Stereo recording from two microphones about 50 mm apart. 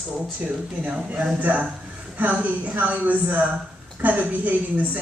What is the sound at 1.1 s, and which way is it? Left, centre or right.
A woman's voice, right.